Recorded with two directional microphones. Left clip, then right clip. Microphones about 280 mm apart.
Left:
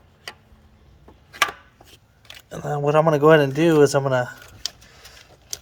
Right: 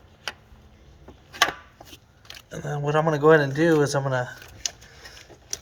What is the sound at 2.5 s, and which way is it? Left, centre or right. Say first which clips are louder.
A man's voice: left 5 dB; centre.